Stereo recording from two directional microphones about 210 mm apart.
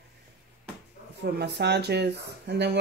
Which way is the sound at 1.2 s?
50° right (ahead or behind).